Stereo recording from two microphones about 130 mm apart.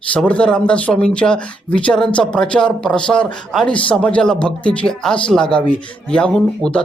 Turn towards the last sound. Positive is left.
turn(degrees=5)  # may be behind; listen again after turning